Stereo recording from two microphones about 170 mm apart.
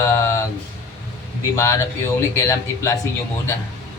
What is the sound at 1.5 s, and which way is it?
Speech, 15° left (ahead or behind).